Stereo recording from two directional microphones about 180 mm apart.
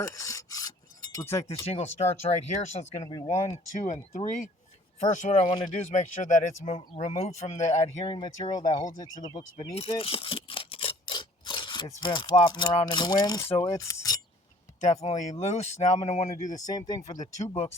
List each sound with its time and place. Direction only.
0.0 s filing: 15° left (ahead or behind)
1.1 s a sound: 15° left (ahead or behind)
1.6 s speech: 35° left (ahead or behind)
3.0 s speech: 20° left (ahead or behind)
3.5 s speech: 30° left (ahead or behind)
4.1 s speech: 45° left (ahead or behind)
8.0 s speech: 25° left (ahead or behind)
13.6 s a sound: 15° left (ahead or behind)
15.0 s speech: 40° left (ahead or behind)
16.6 s speech: 20° left (ahead or behind)
17.3 s speech: 35° left (ahead or behind)